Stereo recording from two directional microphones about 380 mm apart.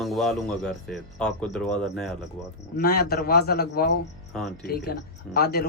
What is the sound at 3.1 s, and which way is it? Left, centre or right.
Speech, left.